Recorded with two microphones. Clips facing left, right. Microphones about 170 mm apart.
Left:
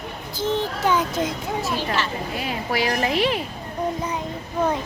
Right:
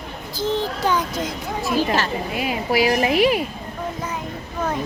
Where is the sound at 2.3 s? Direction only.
10° right (ahead or behind).